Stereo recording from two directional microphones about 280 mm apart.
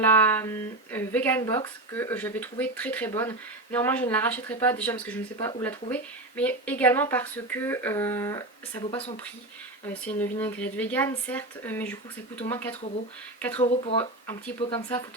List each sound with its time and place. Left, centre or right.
0.1 s speech: centre
9.9 s speech: centre
13.6 s speech: left
14.0 s speech: centre